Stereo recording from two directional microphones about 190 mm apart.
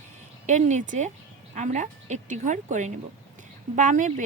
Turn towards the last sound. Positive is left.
turn(degrees=-40)  # may be behind; listen again after turning